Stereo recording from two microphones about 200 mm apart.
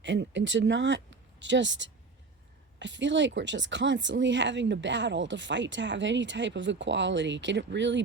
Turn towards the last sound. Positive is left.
turn(degrees=-65)  # may be behind; listen again after turning